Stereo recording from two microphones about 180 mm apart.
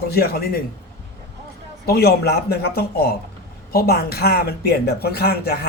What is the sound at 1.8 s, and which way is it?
Speech, 60° left (ahead or behind).